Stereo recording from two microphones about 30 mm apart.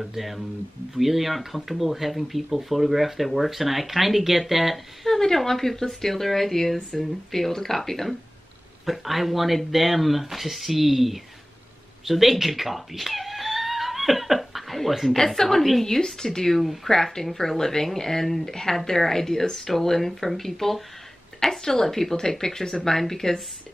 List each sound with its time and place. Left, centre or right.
0.0 s speech: centre
5.0 s speech: centre
8.8 s speech: centre
12.0 s cat: centre
15.2 s a woman's voice: centre